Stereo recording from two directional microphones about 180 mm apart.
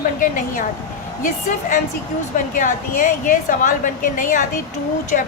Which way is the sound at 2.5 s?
45° left (ahead or behind).